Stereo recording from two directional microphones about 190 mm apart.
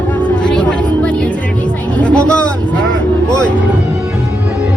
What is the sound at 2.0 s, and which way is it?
Speech, 5° left (ahead or behind).